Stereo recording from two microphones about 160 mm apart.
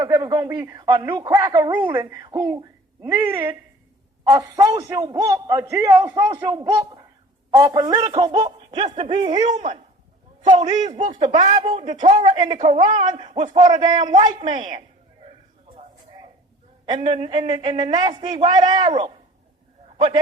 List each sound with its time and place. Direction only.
0.0 s a man's voice: 25° right (ahead or behind)
1.7 s a woman's voice: 10° right (ahead or behind)
4.2 s a man's voice: 20° right (ahead or behind); by 9.7 s 45° right (ahead or behind)
10.5 s a man's voice: 30° right (ahead or behind)
10.8 s speech: 45° right (ahead or behind)
11.1 s a man's voice: 30° right (ahead or behind)
11.3 s speech: 50° right (ahead or behind)
11.6 s a man's voice: 35° right (ahead or behind)
13.4 s speech: 50° right (ahead or behind)
13.7 s a man's voice: 25° right (ahead or behind)
14.5 s a sound: 35° right (ahead or behind)
16.8 s a man's voice: 30° right (ahead or behind)